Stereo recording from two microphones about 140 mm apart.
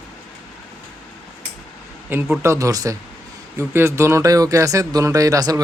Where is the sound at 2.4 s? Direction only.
20° right (ahead or behind).